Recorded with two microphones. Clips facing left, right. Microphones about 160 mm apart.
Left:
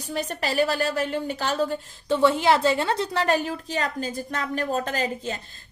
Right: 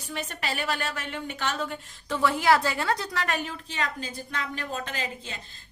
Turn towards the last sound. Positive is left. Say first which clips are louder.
# left 8 dB
turn(degrees=40)  # may be behind; listen again after turning